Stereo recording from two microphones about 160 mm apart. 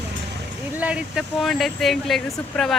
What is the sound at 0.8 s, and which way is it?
Speech, 10° right (ahead or behind).